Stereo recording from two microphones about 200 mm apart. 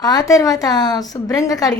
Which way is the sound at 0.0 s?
20° left (ahead or behind).